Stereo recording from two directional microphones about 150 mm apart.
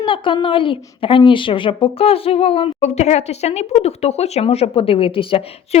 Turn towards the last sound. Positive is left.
turn(degrees=35)  # may be behind; listen again after turning